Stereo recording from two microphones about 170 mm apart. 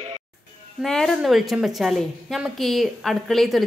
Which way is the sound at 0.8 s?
5° left (ahead or behind).